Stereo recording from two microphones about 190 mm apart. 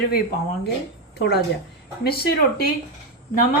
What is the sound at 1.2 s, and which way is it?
A woman's voice, 60° left (ahead or behind).